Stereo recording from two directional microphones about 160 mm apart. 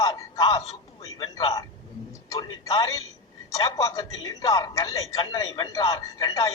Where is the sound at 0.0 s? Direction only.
25° left (ahead or behind).